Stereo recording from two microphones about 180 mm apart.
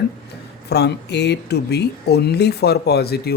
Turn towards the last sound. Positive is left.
turn(degrees=60)  # may be behind; listen again after turning